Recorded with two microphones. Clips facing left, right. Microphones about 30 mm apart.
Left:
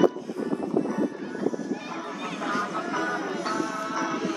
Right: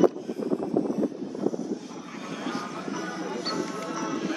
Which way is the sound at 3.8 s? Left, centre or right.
Centre.